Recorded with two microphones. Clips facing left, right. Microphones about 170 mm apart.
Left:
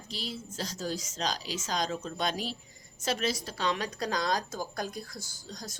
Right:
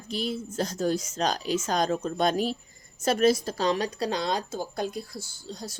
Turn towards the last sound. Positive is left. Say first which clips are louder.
# right 5 dB
turn(degrees=-30)  # may be behind; listen again after turning